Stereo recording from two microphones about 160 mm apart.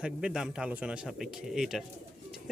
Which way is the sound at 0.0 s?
5° right (ahead or behind).